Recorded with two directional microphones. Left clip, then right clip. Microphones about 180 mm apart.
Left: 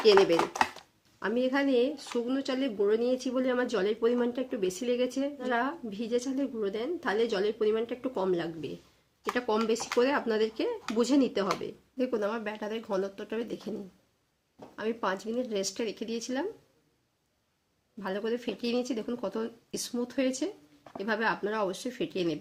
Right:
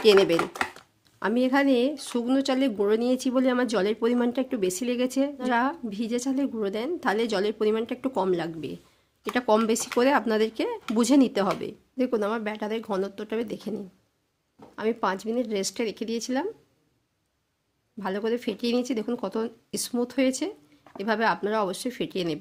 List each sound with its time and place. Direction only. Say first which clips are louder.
0.0 s speech: right 3 dB; 55° right (ahead or behind)
0.5 s chopping: left 1 dB; 10° left (ahead or behind)
1.2 s speech: right 5 dB; 50° right (ahead or behind)
14.8 s speech: right 5 dB; 50° right (ahead or behind)
18.0 s speech: right 5 dB; 50° right (ahead or behind)